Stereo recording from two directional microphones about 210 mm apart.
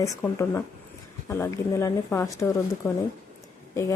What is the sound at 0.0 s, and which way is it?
A woman's voice, 15° left (ahead or behind).